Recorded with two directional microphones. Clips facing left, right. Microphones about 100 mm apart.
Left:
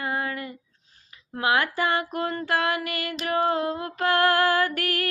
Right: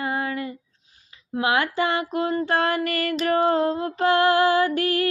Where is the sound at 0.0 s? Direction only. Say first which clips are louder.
Right 3 dB; 25° right (ahead or behind).